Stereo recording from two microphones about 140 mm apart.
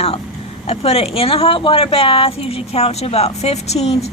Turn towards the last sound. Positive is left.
turn(degrees=50)  # may be behind; listen again after turning